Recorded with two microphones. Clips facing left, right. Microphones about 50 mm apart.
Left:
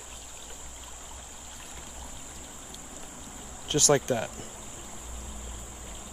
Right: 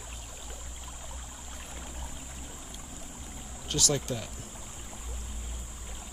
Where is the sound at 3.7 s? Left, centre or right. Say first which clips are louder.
Left 7 dB; left.